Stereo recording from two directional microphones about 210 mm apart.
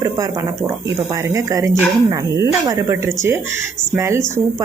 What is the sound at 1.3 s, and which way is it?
Speech, 15° right (ahead or behind).